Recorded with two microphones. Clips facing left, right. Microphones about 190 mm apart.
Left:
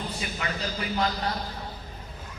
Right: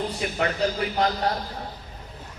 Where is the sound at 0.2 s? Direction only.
55° right (ahead or behind).